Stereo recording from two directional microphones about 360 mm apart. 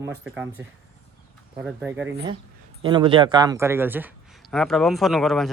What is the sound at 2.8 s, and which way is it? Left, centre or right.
A man's voice, centre.